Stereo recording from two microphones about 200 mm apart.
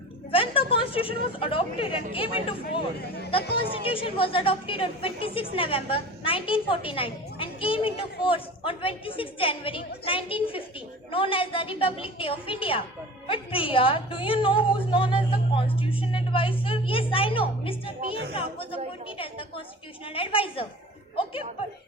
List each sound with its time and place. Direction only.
0.3 s a woman's voice: 25° left (ahead or behind)
3.7 s speech: 25° left (ahead or behind)
13.2 s a sound: 25° left (ahead or behind)
18.3 s chatter: 25° left (ahead or behind)
19.0 s a sound: 25° left (ahead or behind)
20.1 s speech: 25° left (ahead or behind)